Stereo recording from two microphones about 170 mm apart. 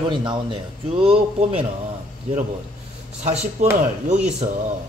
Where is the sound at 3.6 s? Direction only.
45° right (ahead or behind).